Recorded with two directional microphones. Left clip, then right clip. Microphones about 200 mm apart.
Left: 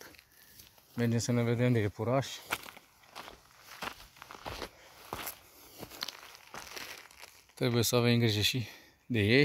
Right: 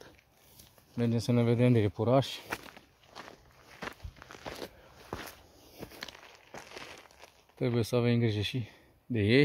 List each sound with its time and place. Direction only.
0.9 s speech: 5° left (ahead or behind)
1.3 s speech: 15° right (ahead or behind)
2.4 s a sound: 5° right (ahead or behind)
3.8 s walk: 5° right (ahead or behind)
5.8 s crumpling: centre (ahead or behind)